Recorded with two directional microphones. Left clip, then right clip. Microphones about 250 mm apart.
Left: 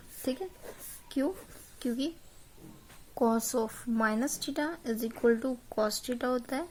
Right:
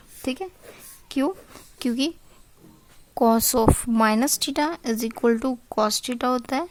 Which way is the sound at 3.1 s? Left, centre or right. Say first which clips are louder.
Right 9 dB; right.